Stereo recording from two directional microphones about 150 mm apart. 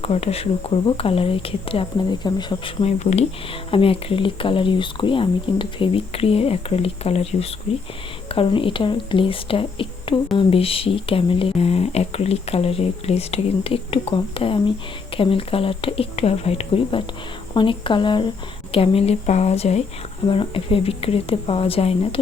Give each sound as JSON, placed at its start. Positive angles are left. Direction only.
{"t": 0.0, "sound": "speech", "side_deg": 40}
{"t": 20.2, "sound": "speech", "side_deg": 35}